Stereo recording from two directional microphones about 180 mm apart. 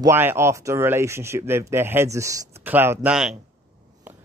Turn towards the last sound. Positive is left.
turn(degrees=-5)  # may be behind; listen again after turning